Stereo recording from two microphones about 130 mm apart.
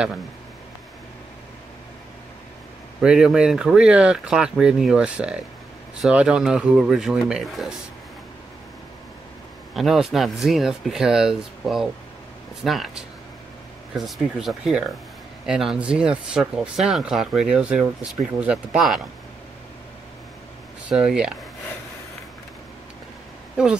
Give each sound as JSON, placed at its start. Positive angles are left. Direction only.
{"t": 3.0, "sound": "speech", "side_deg": -5}
{"t": 9.8, "sound": "speech", "side_deg": 0}
{"t": 20.9, "sound": "speech", "side_deg": -5}